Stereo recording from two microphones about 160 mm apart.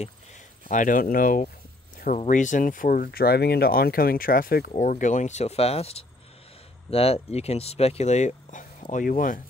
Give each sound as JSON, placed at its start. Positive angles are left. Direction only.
{"t": 0.7, "sound": "speech", "side_deg": 55}
{"t": 4.7, "sound": "speech", "side_deg": 55}